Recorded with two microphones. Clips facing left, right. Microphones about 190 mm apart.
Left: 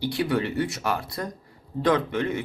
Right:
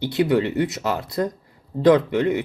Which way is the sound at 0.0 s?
20° right (ahead or behind).